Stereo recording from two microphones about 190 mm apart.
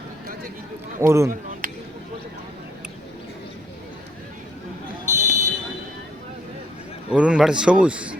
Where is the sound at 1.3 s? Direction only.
45° right (ahead or behind).